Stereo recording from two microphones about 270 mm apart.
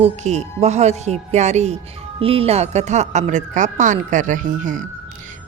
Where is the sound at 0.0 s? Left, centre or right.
Right.